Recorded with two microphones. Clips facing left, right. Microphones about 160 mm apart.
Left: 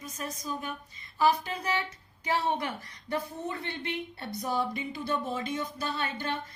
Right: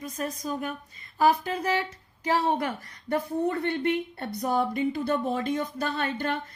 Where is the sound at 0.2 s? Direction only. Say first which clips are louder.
Right 5 dB; 50° right (ahead or behind).